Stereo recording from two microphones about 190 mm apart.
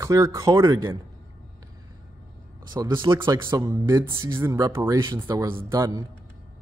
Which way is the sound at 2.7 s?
20° right (ahead or behind).